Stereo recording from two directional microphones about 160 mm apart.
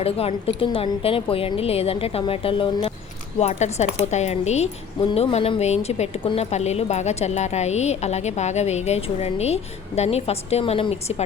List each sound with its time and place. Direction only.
0.0 s a woman's voice: 40° left (ahead or behind)
3.3 s speech: 45° left (ahead or behind)